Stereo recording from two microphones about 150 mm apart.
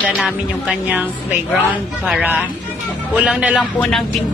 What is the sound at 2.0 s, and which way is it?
Speech, 10° right (ahead or behind).